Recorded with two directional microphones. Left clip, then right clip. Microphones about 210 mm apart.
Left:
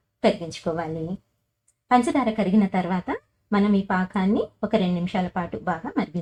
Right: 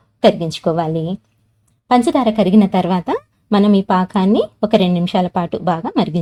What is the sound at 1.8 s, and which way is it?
A woman's voice, 35° right (ahead or behind).